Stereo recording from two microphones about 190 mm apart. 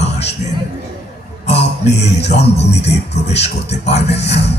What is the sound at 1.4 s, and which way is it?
Music, 35° left (ahead or behind).